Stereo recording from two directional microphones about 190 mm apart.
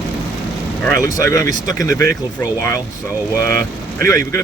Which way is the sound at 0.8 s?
15° left (ahead or behind).